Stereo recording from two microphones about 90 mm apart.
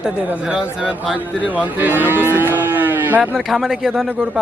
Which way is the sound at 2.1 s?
25° right (ahead or behind).